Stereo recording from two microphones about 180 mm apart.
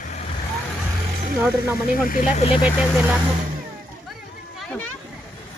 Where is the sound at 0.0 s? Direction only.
40° left (ahead or behind).